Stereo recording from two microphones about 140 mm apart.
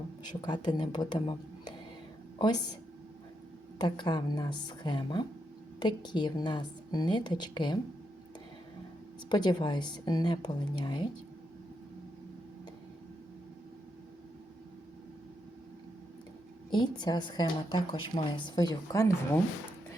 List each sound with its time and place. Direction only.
0.4 s a woman's voice: 30° left (ahead or behind)
3.8 s a woman's voice: 30° left (ahead or behind)
9.3 s a woman's voice: 30° left (ahead or behind)
16.6 s a woman's voice: 35° left (ahead or behind)